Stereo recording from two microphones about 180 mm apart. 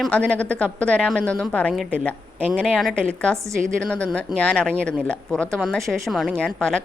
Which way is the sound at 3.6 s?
5° left (ahead or behind).